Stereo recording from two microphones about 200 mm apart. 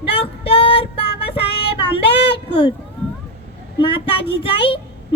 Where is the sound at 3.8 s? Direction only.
25° left (ahead or behind).